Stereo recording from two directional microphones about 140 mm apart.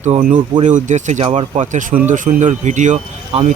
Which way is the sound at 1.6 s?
65° right (ahead or behind).